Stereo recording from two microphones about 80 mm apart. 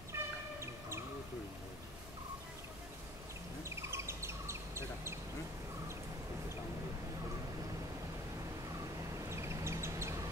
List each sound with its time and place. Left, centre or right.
0.1 s bird: right
3.6 s bird: right
9.3 s bird: right